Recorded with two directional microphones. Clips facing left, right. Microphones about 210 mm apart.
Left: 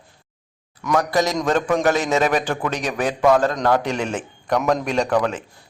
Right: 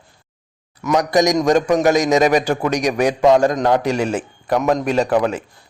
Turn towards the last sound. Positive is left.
turn(degrees=-10)  # may be behind; listen again after turning